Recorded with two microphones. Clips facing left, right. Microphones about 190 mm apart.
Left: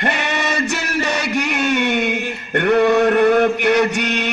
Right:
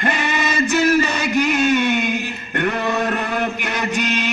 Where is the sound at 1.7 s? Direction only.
70° left (ahead or behind).